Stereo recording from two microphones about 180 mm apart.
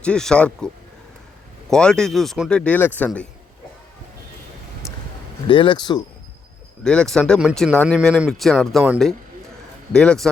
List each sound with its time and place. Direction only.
0.0 s speech: 5° left (ahead or behind)
1.7 s speech: 5° left (ahead or behind)
5.5 s speech: 30° left (ahead or behind)
6.8 s speech: 5° left (ahead or behind)
9.9 s speech: 5° left (ahead or behind)